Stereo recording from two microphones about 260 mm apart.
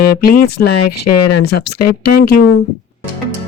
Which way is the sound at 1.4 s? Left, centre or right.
Left.